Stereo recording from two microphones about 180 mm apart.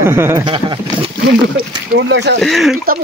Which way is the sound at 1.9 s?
75° right (ahead or behind).